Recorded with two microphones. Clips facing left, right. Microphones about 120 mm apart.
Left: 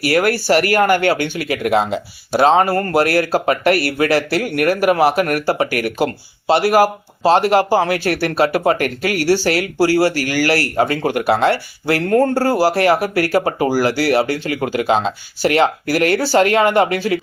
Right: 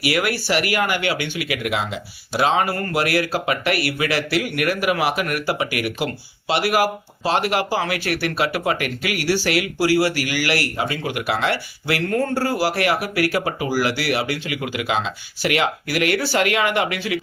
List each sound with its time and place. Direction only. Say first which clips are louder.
0.0 s speech: left 6 dB; 40° left (ahead or behind)